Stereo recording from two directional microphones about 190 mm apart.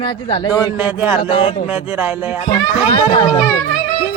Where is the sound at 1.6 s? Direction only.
10° right (ahead or behind).